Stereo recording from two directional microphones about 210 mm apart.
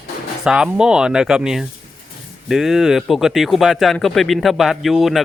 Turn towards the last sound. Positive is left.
turn(degrees=0)  # may be behind; listen again after turning